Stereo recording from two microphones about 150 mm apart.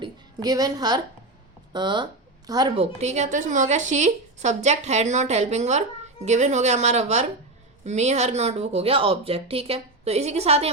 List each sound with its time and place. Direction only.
0.0 s a woman's voice: 25° right (ahead or behind)
2.7 s a woman's voice: 45° right (ahead or behind)